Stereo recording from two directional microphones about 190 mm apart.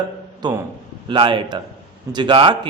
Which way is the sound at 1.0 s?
25° right (ahead or behind).